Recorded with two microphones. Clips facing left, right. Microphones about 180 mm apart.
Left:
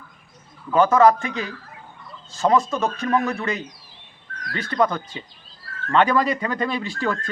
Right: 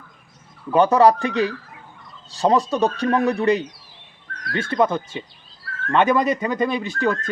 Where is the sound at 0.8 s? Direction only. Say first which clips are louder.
Right 1 dB; 35° right (ahead or behind).